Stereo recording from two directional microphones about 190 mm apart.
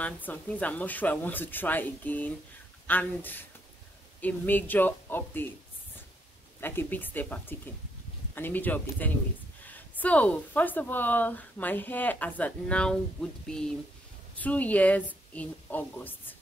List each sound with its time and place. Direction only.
0.0 s speech: 10° left (ahead or behind)
6.6 s speech: 10° left (ahead or behind)